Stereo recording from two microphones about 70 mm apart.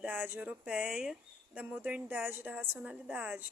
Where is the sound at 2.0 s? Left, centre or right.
Right.